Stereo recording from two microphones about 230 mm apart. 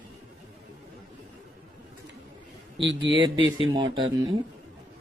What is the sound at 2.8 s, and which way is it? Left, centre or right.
Speech, right.